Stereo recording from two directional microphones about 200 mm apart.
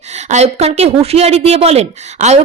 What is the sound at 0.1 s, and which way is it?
A woman's voice, 35° right (ahead or behind).